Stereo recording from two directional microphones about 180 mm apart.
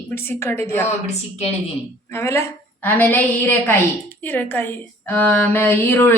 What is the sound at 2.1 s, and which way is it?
A woman's voice, 15° left (ahead or behind).